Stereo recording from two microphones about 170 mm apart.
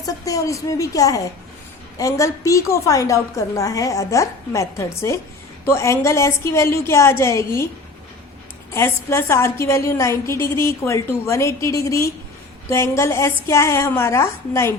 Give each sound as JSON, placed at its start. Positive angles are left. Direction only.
{"t": 0.0, "sound": "a woman's voice", "side_deg": 20}
{"t": 8.7, "sound": "a woman's voice", "side_deg": 15}